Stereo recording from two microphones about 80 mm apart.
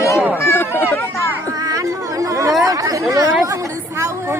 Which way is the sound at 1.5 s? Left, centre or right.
Right.